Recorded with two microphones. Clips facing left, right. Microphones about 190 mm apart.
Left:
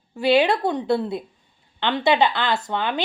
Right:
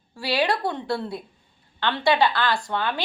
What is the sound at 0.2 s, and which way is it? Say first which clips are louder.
A woman's voice: left 6 dB; 20° left (ahead or behind).